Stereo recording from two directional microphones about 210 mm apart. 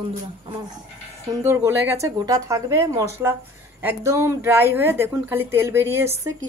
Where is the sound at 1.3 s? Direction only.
15° right (ahead or behind).